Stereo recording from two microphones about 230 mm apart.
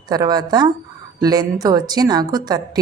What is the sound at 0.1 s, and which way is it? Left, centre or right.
Speech, centre.